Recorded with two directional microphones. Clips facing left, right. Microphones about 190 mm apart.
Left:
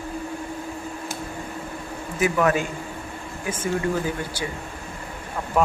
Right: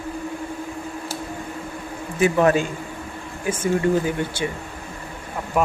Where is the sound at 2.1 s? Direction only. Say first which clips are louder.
Right 4 dB; 30° right (ahead or behind).